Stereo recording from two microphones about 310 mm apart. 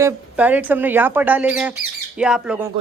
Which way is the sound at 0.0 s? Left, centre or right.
Centre.